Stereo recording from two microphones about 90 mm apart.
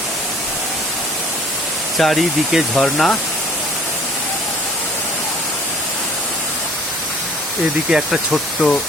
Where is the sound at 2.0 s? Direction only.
Centre (ahead or behind).